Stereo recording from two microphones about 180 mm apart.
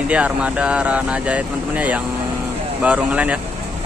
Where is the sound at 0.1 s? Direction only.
5° right (ahead or behind).